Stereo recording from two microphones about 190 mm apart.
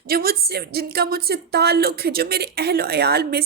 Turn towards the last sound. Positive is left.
turn(degrees=-55)  # may be behind; listen again after turning